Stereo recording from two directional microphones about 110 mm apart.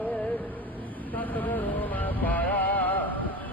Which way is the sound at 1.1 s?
15° left (ahead or behind).